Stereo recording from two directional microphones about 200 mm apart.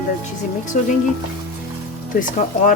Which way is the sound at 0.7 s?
40° left (ahead or behind).